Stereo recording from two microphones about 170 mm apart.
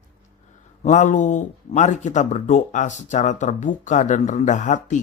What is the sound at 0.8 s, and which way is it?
Speech, 45° left (ahead or behind).